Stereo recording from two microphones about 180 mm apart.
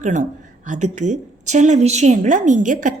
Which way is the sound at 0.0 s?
40° right (ahead or behind).